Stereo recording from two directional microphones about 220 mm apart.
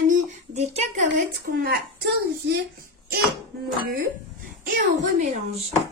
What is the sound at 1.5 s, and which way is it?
A child's voice, 40° right (ahead or behind).